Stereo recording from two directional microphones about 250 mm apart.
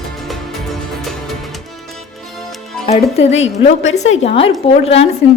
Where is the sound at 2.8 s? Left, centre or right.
Left.